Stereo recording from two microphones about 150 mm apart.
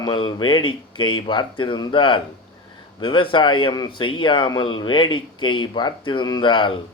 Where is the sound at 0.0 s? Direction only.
30° left (ahead or behind).